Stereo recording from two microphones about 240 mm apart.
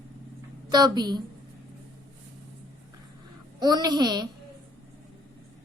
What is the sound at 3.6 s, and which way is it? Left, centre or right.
Speech, centre.